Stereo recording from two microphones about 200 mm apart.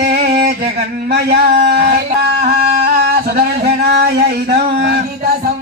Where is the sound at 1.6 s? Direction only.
50° right (ahead or behind).